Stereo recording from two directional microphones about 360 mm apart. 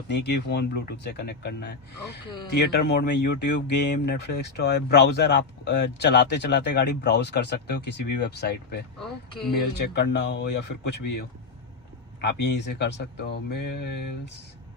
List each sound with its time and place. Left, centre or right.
0.1 s speech: left
9.0 s speech: centre
9.5 s speech: left
10.9 s speech: left
12.2 s speech: left